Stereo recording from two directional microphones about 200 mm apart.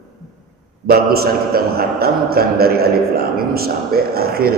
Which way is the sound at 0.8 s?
50° right (ahead or behind).